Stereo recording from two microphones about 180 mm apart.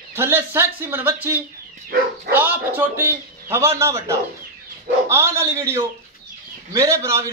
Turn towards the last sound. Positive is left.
turn(degrees=-15)  # may be behind; listen again after turning